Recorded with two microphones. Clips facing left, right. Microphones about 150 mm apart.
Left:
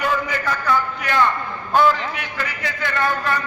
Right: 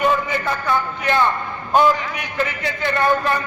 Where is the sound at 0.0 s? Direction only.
25° right (ahead or behind).